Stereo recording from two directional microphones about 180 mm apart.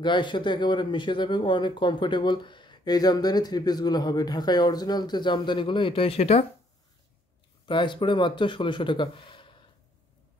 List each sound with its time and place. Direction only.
0.0 s speech: 25° left (ahead or behind)
7.6 s speech: 25° left (ahead or behind)